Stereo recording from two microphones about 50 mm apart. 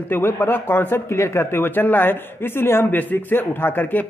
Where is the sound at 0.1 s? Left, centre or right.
Left.